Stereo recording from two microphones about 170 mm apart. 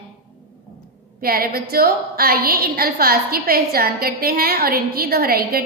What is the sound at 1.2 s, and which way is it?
A woman's voice, 65° right (ahead or behind).